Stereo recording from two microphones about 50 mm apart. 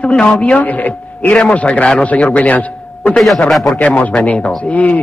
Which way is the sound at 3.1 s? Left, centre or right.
Centre.